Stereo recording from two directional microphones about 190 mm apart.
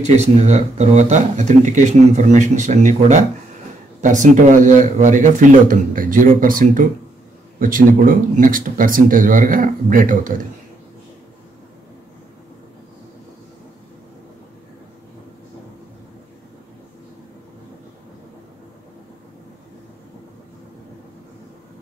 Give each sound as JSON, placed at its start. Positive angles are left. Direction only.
{"t": 0.0, "sound": "speech", "side_deg": -35}